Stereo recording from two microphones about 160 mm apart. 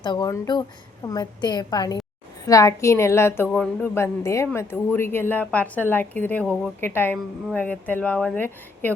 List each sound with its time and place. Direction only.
0.0 s a woman's voice: 25° left (ahead or behind); by 8.9 s 10° left (ahead or behind)